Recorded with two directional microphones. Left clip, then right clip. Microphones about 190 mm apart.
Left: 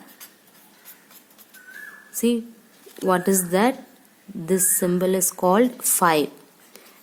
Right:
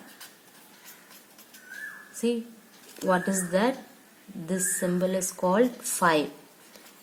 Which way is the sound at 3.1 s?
60° left (ahead or behind).